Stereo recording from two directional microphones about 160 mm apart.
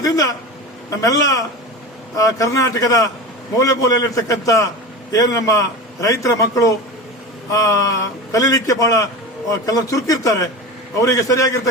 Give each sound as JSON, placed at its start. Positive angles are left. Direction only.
{"t": 0.0, "sound": "a man's voice", "side_deg": 20}